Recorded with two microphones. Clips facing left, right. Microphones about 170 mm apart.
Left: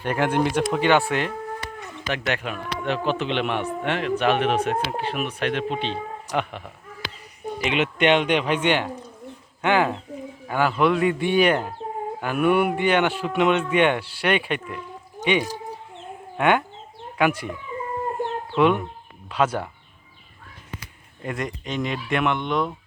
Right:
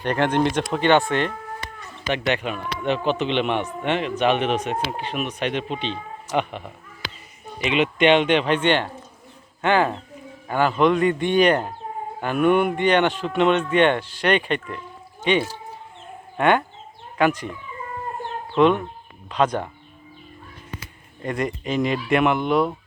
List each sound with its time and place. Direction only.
0.0 s speech: 10° left (ahead or behind)
7.6 s speech: 60° left (ahead or behind)
8.0 s speech: centre (ahead or behind)
18.5 s speech: 10° left (ahead or behind)
21.2 s speech: centre (ahead or behind)